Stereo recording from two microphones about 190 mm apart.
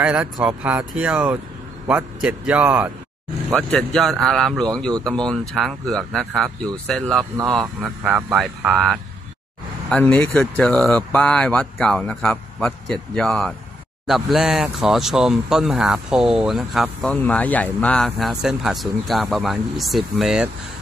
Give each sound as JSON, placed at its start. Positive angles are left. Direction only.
{"t": 0.0, "sound": "speech", "side_deg": -5}
{"t": 3.5, "sound": "speech", "side_deg": 5}